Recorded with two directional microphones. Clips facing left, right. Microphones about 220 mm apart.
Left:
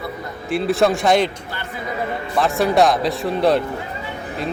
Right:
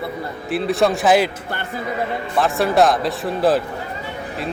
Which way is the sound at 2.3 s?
Centre (ahead or behind).